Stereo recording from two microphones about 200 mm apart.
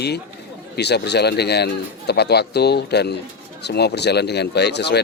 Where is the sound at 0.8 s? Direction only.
55° left (ahead or behind).